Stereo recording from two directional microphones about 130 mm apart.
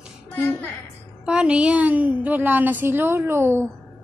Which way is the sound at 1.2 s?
10° right (ahead or behind).